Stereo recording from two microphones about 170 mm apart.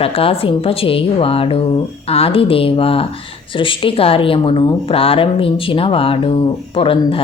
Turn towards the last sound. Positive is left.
turn(degrees=30)  # may be behind; listen again after turning